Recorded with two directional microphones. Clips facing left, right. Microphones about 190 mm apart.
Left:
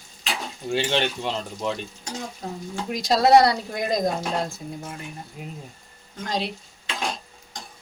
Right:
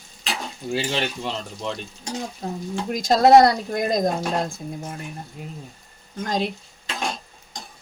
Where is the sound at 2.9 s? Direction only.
50° right (ahead or behind).